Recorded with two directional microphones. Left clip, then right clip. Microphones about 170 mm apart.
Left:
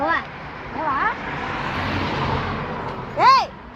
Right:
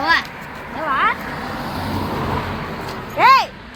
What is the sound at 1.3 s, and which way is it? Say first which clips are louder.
Speech: even; 45° left (ahead or behind).